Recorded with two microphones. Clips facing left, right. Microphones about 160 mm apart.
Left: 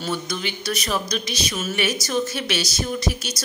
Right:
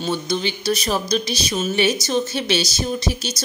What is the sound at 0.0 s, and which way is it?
A woman's voice, 25° right (ahead or behind).